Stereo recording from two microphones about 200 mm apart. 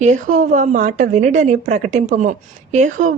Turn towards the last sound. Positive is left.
turn(degrees=-40)  # may be behind; listen again after turning